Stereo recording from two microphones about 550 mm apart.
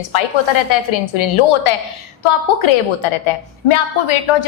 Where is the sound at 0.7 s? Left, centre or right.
Left.